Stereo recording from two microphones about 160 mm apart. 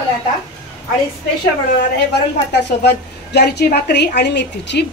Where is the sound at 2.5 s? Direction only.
90° left.